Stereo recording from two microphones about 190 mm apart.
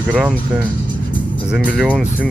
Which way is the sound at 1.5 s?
5° right (ahead or behind).